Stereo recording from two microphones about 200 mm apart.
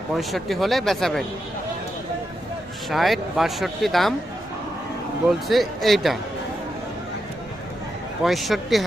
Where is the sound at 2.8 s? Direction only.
Centre (ahead or behind).